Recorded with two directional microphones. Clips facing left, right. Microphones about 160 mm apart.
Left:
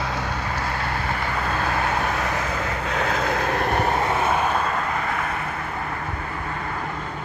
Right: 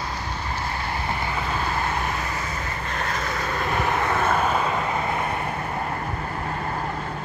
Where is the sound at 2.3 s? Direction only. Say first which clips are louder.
Left 4 dB; 70° left (ahead or behind); by 4.0 s 45° left (ahead or behind).